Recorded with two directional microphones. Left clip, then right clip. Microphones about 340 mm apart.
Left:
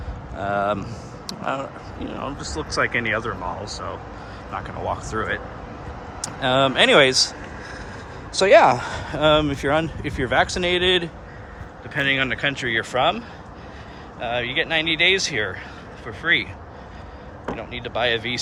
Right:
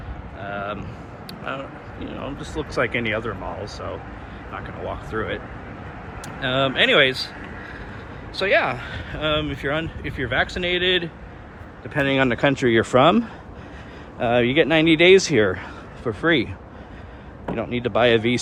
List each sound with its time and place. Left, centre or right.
0.4 s speech: centre
6.2 s speech: centre
8.4 s speech: centre
11.9 s speech: centre
17.5 s speech: centre